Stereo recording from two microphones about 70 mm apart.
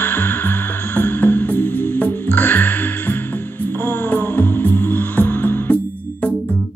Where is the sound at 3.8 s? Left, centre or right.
Left.